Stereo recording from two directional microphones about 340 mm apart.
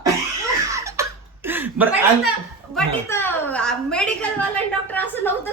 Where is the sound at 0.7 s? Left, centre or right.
Centre.